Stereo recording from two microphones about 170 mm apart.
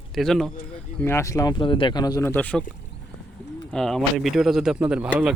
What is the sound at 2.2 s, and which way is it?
Speech, 10° left (ahead or behind).